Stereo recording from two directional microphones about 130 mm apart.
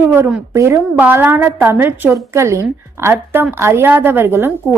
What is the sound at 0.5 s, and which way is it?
A woman's voice, 20° right (ahead or behind).